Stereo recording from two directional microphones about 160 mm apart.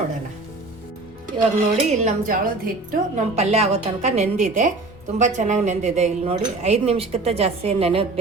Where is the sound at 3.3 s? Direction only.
40° right (ahead or behind).